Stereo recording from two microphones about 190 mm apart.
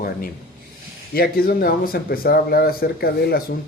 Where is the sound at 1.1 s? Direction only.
50° left (ahead or behind).